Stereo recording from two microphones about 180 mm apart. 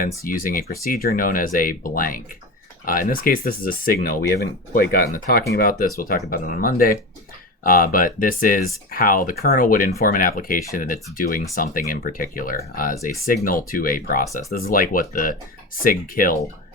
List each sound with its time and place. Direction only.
0.3 s speech: 50° left (ahead or behind)